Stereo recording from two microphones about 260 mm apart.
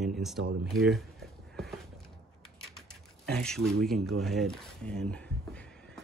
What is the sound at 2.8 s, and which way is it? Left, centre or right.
Typing, centre.